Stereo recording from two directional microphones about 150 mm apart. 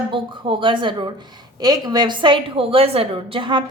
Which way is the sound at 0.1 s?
35° right (ahead or behind).